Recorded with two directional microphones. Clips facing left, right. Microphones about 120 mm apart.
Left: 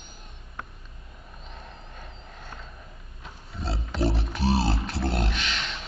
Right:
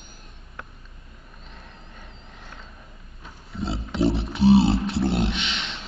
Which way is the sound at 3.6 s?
20° right (ahead or behind).